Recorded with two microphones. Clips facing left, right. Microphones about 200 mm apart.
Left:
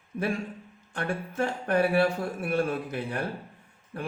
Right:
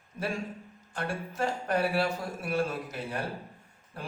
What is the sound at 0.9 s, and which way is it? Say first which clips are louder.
Speech: left 3 dB; 60° left (ahead or behind).